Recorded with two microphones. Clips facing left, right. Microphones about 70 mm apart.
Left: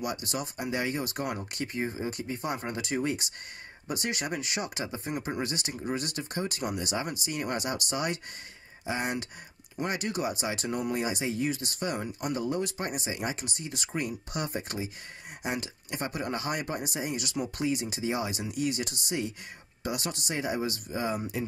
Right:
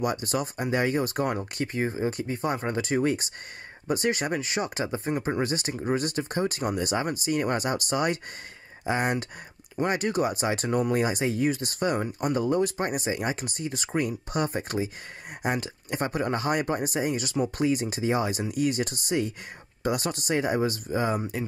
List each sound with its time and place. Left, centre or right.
0.0 s speech: right